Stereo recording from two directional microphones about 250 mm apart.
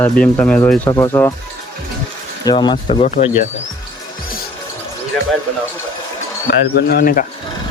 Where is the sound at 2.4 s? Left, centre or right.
Centre.